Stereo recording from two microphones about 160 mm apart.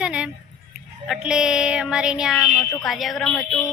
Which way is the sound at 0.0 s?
5° right (ahead or behind).